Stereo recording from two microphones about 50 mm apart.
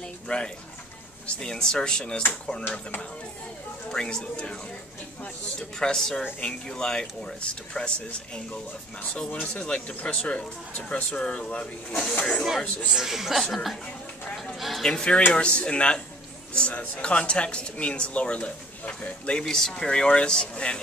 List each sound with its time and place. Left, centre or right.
0.3 s speech: left
1.2 s speech: centre
3.9 s speech: centre
5.6 s speech: centre
9.3 s speech: left
12.9 s speech: centre
14.9 s speech: centre
19.4 s speech: centre